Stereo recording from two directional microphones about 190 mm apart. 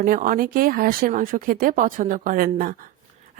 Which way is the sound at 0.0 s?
50° right (ahead or behind).